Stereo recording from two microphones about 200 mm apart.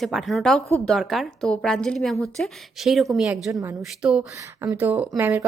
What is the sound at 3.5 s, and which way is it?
Speech, 15° right (ahead or behind).